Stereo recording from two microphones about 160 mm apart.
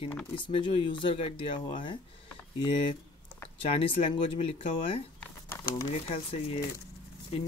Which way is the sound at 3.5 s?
35° left (ahead or behind).